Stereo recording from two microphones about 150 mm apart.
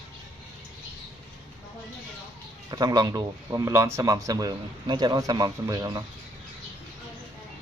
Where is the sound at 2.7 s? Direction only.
25° right (ahead or behind).